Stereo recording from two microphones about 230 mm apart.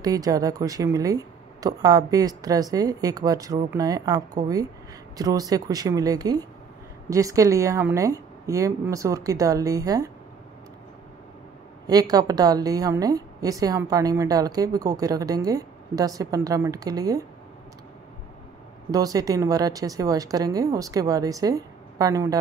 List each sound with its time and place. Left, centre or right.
0.0 s a woman's voice: centre
11.9 s a woman's voice: centre
18.9 s a woman's voice: centre